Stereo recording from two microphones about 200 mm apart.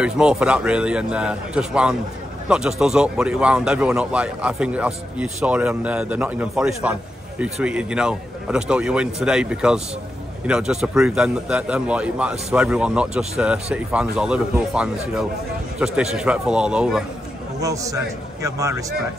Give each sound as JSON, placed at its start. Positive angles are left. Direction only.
{"t": 0.0, "sound": "speech", "side_deg": -5}
{"t": 17.6, "sound": "a man's voice", "side_deg": -15}